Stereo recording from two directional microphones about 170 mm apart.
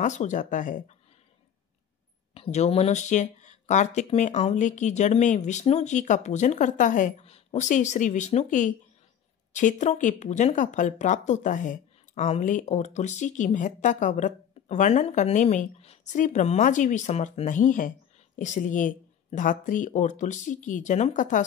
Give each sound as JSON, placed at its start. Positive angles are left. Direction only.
{"t": 0.0, "sound": "speech", "side_deg": 45}
{"t": 2.3, "sound": "speech", "side_deg": 40}